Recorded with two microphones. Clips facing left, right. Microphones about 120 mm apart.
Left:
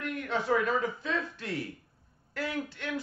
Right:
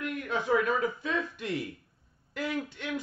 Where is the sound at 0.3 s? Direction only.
10° right (ahead or behind).